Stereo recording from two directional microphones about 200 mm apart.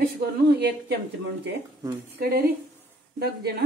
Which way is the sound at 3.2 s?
55° right (ahead or behind).